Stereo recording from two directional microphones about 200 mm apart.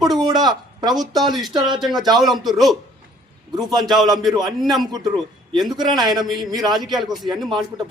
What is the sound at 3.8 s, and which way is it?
Speech, centre (ahead or behind).